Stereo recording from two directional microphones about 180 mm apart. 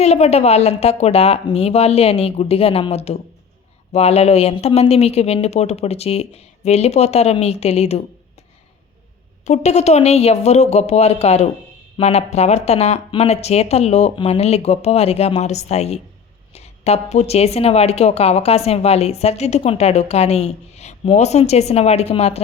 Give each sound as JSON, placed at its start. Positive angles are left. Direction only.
{"t": 0.0, "sound": "speech", "side_deg": 35}
{"t": 9.5, "sound": "speech", "side_deg": 40}